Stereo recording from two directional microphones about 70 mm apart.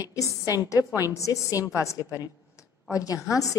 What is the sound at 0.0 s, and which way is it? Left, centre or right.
A woman's voice, left.